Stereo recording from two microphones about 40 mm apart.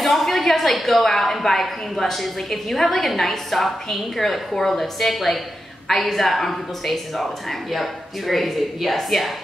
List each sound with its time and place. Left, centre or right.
0.0 s a woman's voice: centre